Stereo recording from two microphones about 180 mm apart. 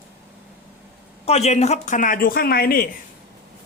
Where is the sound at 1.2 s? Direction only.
35° left (ahead or behind); by 2.8 s 55° left (ahead or behind).